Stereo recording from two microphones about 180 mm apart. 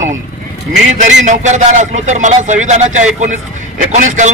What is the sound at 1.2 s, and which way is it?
A man's voice, 40° right (ahead or behind).